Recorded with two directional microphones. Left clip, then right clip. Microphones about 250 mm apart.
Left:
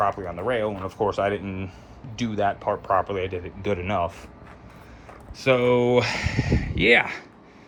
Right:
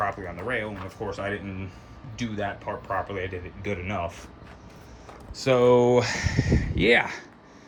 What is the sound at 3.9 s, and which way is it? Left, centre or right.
Speech, centre.